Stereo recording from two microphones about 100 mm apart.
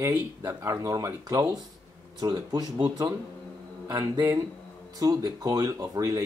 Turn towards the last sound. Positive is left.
turn(degrees=-35)  # may be behind; listen again after turning